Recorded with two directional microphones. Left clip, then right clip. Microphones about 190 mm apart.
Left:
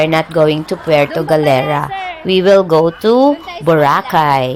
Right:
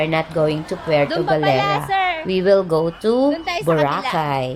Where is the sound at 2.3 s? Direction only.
20° left (ahead or behind).